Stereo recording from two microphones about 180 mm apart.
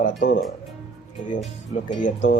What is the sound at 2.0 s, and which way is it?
Speech, 45° left (ahead or behind).